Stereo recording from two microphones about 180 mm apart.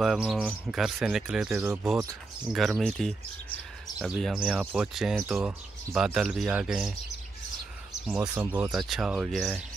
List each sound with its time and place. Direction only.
0.0 s speech: centre (ahead or behind)
2.5 s speech: centre (ahead or behind)
8.1 s speech: 10° right (ahead or behind)